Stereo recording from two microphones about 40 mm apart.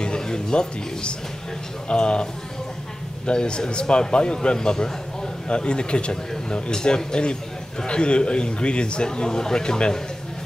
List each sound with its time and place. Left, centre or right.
0.0 s a sound: left
1.9 s a man's voice: left
3.3 s a man's voice: left